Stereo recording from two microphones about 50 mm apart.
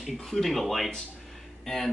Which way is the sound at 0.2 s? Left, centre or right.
Centre.